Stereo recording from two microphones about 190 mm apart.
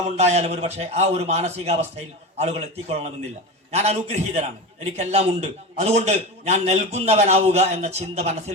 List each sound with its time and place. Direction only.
0.2 s a man's voice: 35° right (ahead or behind)